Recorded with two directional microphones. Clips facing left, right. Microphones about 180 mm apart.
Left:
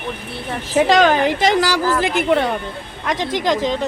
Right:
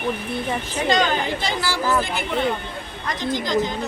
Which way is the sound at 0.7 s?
90° left.